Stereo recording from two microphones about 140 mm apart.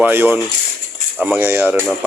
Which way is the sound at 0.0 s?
15° right (ahead or behind).